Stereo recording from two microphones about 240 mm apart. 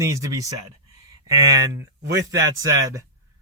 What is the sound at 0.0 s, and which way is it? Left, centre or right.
Speech, centre.